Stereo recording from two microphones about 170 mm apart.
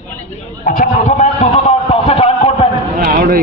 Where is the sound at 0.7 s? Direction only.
50° left (ahead or behind).